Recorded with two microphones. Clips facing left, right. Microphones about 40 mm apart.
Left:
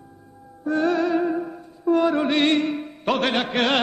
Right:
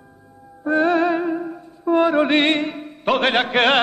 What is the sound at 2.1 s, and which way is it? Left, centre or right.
Music, right.